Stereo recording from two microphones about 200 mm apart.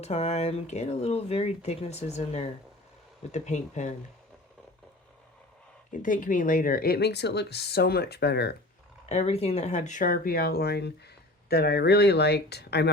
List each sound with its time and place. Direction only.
0.0 s speech: 30° left (ahead or behind)
5.9 s speech: 40° left (ahead or behind)
9.0 s speech: 30° left (ahead or behind); by 12.9 s 55° left (ahead or behind)